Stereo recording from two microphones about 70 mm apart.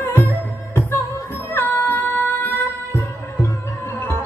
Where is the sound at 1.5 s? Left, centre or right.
Left.